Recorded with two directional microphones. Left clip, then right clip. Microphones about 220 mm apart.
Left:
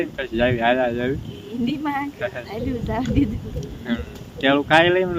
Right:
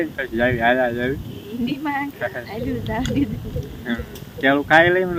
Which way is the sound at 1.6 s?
25° left (ahead or behind).